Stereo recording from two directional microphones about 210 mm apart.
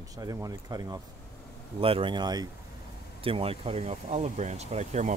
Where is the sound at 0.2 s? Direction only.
15° right (ahead or behind).